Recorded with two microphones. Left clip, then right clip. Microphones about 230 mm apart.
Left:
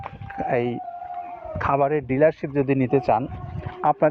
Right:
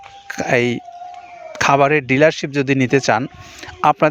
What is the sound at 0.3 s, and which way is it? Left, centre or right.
Speech, right.